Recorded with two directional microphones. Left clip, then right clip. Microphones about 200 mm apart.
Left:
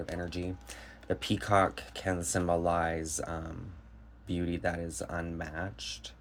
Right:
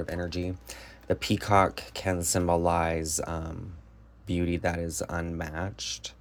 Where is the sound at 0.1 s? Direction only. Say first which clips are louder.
Right 4 dB; 25° right (ahead or behind).